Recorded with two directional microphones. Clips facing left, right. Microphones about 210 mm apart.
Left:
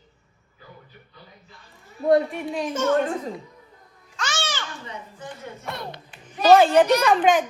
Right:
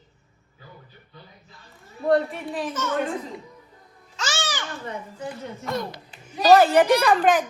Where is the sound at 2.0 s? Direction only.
Centre (ahead or behind).